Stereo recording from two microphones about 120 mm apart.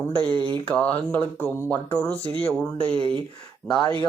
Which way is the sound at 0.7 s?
15° left (ahead or behind).